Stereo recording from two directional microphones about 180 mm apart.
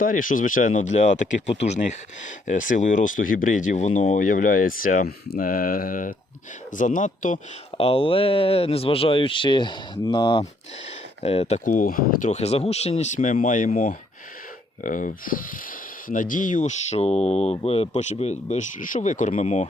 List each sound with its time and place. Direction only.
0.0 s speech: 50° left (ahead or behind)
7.8 s speech: 30° left (ahead or behind)